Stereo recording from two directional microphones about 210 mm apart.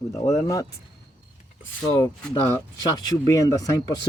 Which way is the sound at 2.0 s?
25° left (ahead or behind).